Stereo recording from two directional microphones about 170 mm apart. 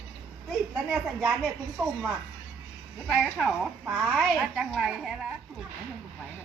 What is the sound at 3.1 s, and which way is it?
A child's voice, 5° right (ahead or behind).